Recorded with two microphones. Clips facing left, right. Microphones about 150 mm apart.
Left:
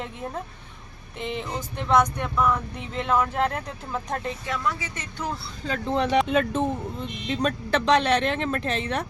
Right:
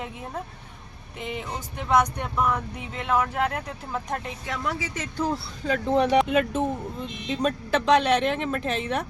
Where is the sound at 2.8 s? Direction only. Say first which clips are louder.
Left 1 dB; 10° right (ahead or behind).